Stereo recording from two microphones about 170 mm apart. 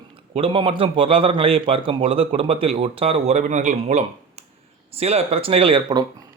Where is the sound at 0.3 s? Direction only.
35° right (ahead or behind).